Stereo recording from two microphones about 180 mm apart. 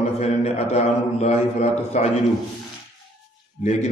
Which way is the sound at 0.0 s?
35° left (ahead or behind).